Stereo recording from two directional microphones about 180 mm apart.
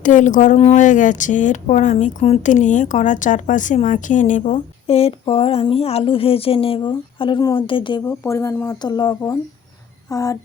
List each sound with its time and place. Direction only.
0.0 s speech: 45° left (ahead or behind); by 8.1 s 25° left (ahead or behind)
8.2 s speech: 15° left (ahead or behind)